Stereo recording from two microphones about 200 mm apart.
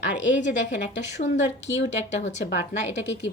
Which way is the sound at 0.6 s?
60° left (ahead or behind).